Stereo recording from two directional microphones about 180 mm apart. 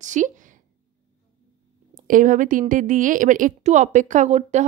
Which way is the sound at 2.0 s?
45° right (ahead or behind).